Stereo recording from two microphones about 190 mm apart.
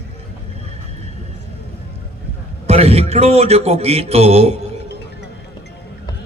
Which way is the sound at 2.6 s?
35° right (ahead or behind).